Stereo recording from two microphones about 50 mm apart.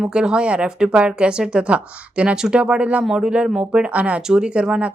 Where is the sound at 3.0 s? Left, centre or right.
Centre.